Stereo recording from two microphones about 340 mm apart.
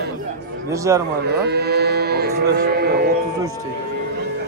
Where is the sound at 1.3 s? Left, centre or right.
Right.